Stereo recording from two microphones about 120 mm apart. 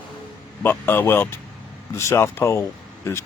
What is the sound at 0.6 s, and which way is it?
A man's voice, 20° left (ahead or behind).